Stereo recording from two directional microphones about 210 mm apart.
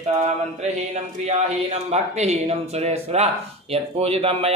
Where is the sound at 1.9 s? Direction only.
30° right (ahead or behind).